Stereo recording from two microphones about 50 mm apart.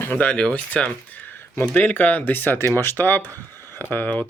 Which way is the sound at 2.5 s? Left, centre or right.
Left.